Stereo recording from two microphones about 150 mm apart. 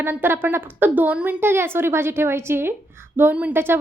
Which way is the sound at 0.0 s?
15° right (ahead or behind).